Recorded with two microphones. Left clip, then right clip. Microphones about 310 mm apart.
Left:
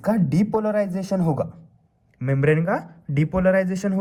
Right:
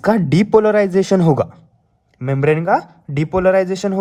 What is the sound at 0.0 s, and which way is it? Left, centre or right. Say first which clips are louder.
Speech: right 7 dB; centre.